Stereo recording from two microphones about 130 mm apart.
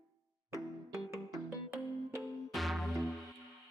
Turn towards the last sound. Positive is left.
turn(degrees=0)  # may be behind; listen again after turning